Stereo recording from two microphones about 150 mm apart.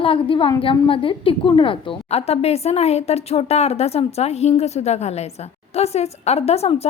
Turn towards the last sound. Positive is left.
turn(degrees=45)  # may be behind; listen again after turning